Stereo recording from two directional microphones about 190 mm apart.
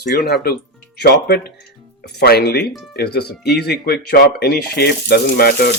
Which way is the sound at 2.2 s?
55° left (ahead or behind).